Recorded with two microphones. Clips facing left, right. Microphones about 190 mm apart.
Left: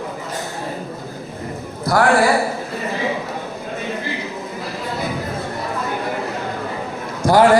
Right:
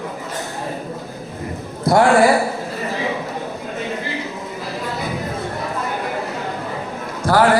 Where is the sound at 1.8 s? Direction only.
25° right (ahead or behind).